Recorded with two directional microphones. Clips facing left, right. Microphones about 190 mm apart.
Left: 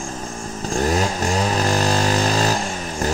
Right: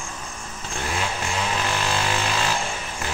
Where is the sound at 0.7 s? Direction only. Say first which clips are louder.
Left 8 dB; 40° left (ahead or behind).